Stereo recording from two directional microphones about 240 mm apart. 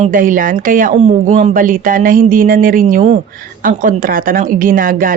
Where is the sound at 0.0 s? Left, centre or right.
Right.